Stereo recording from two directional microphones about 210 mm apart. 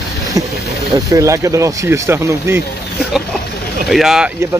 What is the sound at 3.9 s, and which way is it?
Speech, centre (ahead or behind).